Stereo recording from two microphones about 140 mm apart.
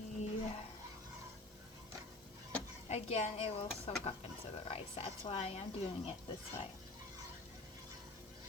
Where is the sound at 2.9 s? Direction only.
50° left (ahead or behind).